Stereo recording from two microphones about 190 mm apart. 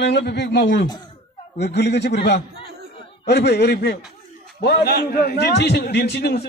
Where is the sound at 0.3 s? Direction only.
65° left (ahead or behind).